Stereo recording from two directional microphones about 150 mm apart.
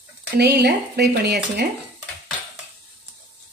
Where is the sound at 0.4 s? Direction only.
90° right.